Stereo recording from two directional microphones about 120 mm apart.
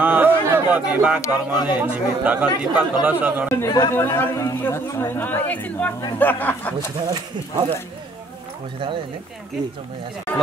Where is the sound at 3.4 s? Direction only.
20° left (ahead or behind).